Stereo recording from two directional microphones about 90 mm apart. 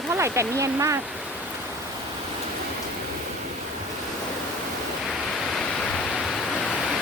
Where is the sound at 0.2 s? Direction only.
35° right (ahead or behind).